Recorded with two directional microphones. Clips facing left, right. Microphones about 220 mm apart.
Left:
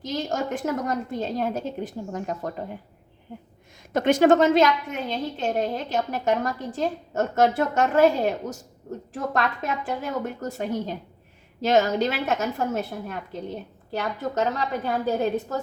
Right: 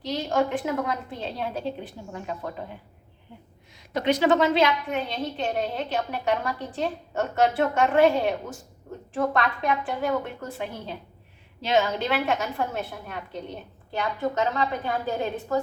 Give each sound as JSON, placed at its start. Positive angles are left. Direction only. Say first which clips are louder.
{"t": 0.1, "sound": "a woman's voice", "louder": "right 2 dB", "side_deg": 45}
{"t": 3.9, "sound": "a woman's voice", "louder": "left 4 dB", "side_deg": 50}